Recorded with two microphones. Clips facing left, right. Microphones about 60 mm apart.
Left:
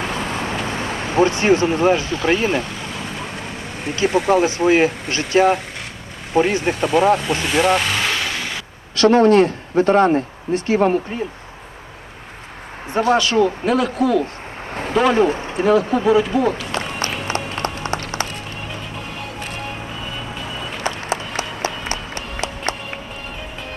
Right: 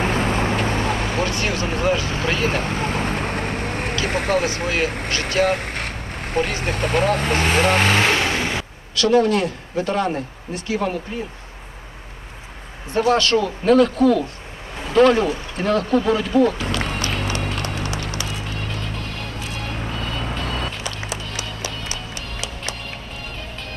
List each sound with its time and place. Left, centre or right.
0.0 s vehicle: right
1.1 s speech: left
2.4 s vehicle: right
4.6 s speech: left
5.5 s a sound: right
6.5 s speech: right
9.0 s speech: left
12.9 s speech: centre
16.7 s music: left
20.8 s music: left